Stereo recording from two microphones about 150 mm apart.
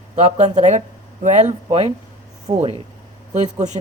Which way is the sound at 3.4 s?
50° right (ahead or behind).